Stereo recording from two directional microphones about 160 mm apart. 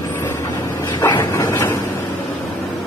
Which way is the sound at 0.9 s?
20° left (ahead or behind).